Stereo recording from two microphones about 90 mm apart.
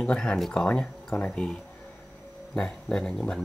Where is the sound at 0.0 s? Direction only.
10° left (ahead or behind).